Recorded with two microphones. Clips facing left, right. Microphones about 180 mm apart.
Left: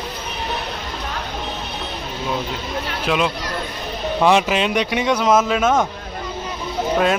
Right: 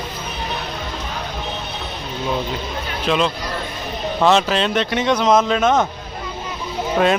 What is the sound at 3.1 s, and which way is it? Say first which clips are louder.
Speech: right 1 dB; 10° left (ahead or behind).